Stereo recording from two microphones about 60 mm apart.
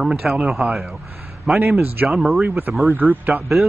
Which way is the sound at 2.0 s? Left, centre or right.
Centre.